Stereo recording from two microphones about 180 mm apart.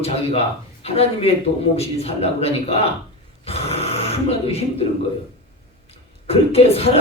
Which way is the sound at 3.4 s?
35° left (ahead or behind).